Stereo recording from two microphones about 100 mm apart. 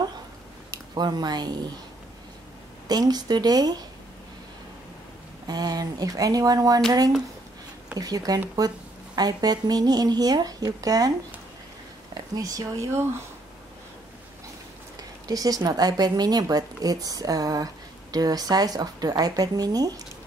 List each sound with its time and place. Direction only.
0.9 s speech: 45° right (ahead or behind)
2.9 s speech: 40° right (ahead or behind)
5.5 s speech: 40° right (ahead or behind)
8.0 s speech: 40° right (ahead or behind)
15.0 s speech: 40° right (ahead or behind)